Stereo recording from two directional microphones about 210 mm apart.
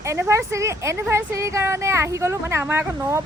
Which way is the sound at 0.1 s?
15° right (ahead or behind).